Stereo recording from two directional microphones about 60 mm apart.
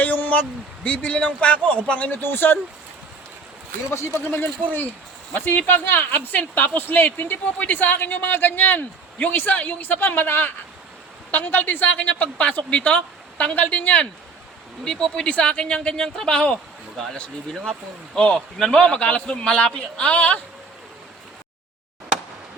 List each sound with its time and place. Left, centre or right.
0.0 s a sound: left
0.9 s a woman's voice: left
3.9 s speech: left
5.3 s a woman's voice: left